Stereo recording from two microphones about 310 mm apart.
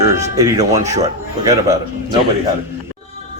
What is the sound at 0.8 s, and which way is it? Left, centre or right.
Speech, right.